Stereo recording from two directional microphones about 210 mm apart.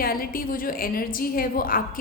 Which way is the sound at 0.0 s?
45° left (ahead or behind).